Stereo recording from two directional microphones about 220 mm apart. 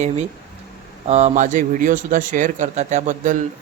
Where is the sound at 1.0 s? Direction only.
30° right (ahead or behind).